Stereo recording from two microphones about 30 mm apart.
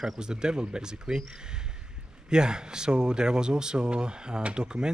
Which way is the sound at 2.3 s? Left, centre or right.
Right.